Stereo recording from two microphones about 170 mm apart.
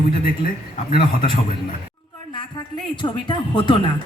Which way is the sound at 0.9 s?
30° left (ahead or behind).